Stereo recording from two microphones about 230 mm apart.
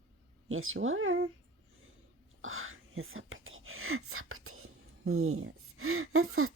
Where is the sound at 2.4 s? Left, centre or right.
Right.